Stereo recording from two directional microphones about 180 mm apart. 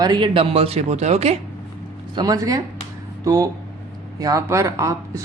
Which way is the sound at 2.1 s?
20° right (ahead or behind).